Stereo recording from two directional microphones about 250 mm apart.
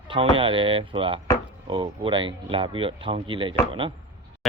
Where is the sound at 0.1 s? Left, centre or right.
Right.